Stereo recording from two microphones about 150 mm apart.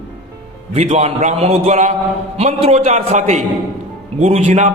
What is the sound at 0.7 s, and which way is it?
A man's voice, 45° right (ahead or behind).